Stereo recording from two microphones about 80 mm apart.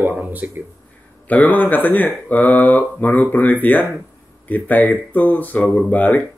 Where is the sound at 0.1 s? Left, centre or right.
Right.